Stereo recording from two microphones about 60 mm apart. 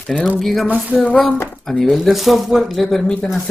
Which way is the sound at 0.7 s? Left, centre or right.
Right.